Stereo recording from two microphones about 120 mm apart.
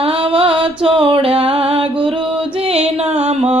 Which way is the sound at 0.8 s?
50° right (ahead or behind).